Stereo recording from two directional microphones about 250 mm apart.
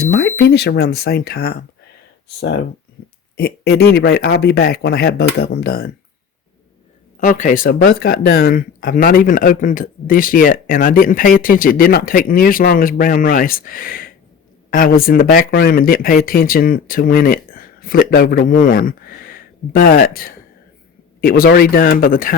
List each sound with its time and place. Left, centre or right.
0.0 s speech: left
3.0 s speech: left
7.2 s speech: left